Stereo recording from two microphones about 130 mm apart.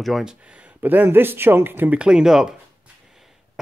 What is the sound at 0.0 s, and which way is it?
Speech, 5° right (ahead or behind).